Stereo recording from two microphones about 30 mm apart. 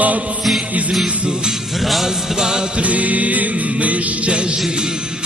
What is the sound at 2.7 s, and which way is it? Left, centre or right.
Music, right.